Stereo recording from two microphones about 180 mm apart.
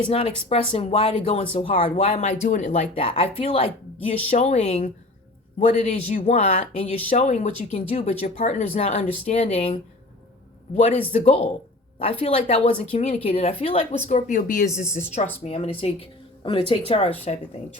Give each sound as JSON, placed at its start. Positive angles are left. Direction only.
{"t": 0.0, "sound": "speech", "side_deg": 30}
{"t": 11.1, "sound": "speech", "side_deg": 35}